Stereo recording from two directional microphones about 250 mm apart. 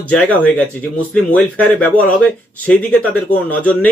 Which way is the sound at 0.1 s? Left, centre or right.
Centre.